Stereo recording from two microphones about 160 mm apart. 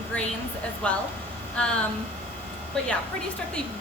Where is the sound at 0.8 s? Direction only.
10° left (ahead or behind).